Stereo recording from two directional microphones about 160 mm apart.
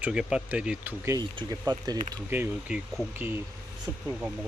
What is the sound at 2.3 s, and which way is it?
Speech, 10° right (ahead or behind).